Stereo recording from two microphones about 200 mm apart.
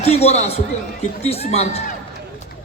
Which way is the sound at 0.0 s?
30° left (ahead or behind).